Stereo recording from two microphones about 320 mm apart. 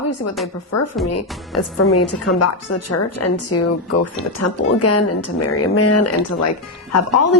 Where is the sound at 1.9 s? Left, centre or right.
Left.